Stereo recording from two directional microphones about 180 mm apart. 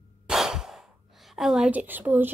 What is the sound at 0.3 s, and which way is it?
Sigh, 5° right (ahead or behind).